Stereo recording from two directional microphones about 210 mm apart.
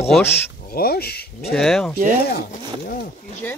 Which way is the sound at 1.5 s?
Centre (ahead or behind).